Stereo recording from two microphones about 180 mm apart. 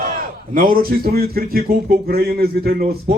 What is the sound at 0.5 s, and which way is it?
A man's voice, 55° right (ahead or behind).